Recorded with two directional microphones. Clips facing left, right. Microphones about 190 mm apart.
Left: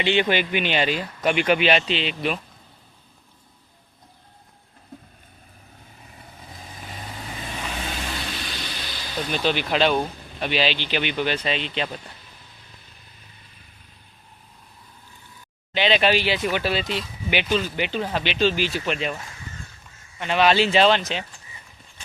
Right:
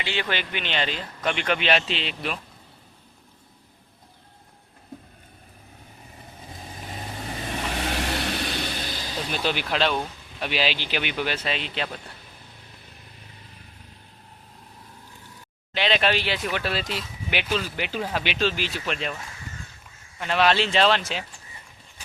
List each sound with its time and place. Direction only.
0.0 s speech: 20° left (ahead or behind); by 2.4 s centre (ahead or behind)
7.8 s vehicle: 70° right (ahead or behind); by 9.0 s 45° right (ahead or behind)
9.3 s speech: 5° right (ahead or behind)
15.7 s speech: centre (ahead or behind)
20.1 s speech: centre (ahead or behind)